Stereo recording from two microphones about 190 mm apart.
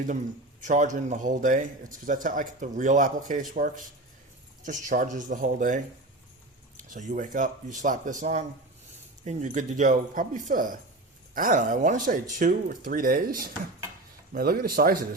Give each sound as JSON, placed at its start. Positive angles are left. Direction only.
{"t": 0.6, "sound": "a man's voice", "side_deg": -40}